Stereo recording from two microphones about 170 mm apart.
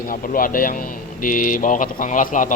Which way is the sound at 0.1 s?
55° left (ahead or behind).